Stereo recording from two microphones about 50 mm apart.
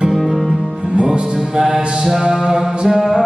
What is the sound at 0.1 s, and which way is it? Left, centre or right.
Music, centre.